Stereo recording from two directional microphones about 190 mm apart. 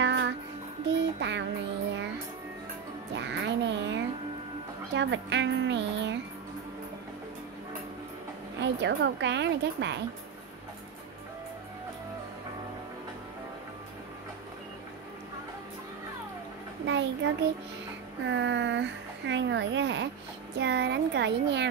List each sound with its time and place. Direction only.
0.0 s music: 70° right (ahead or behind)
0.9 s child singing: 70° right (ahead or behind)
3.2 s a sound: 70° right (ahead or behind)
8.5 s a woman's voice: 70° right (ahead or behind)
16.8 s a sound: 70° right (ahead or behind)
18.2 s speech: 70° right (ahead or behind)